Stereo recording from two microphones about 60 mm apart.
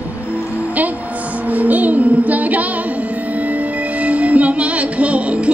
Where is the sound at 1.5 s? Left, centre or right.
Right.